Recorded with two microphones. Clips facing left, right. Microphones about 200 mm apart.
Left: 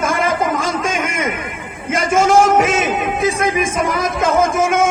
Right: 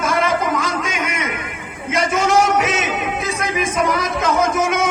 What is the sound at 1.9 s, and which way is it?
A man's voice, 50° left (ahead or behind).